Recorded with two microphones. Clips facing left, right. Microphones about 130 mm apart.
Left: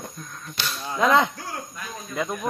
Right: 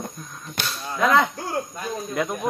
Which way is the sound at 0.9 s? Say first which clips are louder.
Even; 25° left (ahead or behind).